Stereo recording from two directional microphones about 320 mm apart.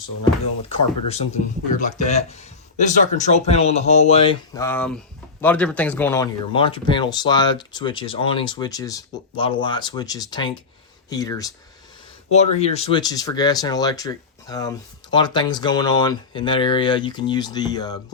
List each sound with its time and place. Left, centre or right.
1.0 s speech: centre